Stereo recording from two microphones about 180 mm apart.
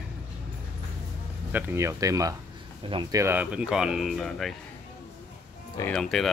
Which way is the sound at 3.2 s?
10° right (ahead or behind).